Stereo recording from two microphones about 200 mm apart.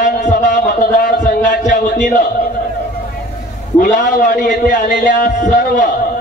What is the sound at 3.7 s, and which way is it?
A man's voice, 40° left (ahead or behind).